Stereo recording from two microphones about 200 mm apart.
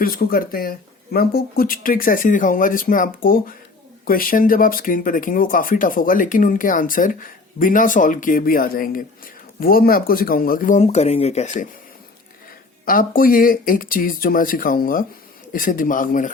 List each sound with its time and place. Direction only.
0.0 s speech: 50° left (ahead or behind)
12.8 s speech: 45° left (ahead or behind)